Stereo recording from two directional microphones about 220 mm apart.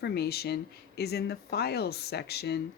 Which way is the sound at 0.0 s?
45° left (ahead or behind).